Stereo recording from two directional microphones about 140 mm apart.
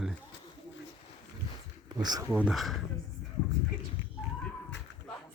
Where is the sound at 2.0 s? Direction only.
25° right (ahead or behind).